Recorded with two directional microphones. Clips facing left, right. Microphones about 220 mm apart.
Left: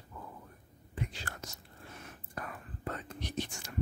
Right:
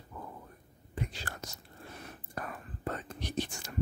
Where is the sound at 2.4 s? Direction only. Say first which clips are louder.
Right 2 dB; 35° right (ahead or behind).